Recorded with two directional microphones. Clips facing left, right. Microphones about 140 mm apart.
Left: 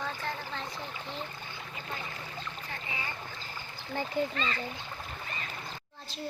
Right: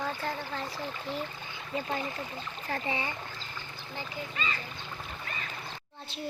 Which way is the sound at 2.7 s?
30° right (ahead or behind).